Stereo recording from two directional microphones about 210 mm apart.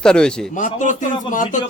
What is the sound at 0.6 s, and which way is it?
Speech, 35° left (ahead or behind).